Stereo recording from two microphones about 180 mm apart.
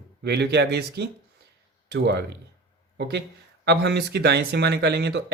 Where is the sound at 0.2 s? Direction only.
65° right (ahead or behind).